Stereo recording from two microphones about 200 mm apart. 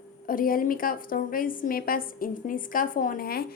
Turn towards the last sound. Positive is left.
turn(degrees=50)  # may be behind; listen again after turning